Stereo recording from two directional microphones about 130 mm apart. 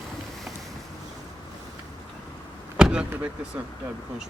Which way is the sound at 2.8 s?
5° right (ahead or behind).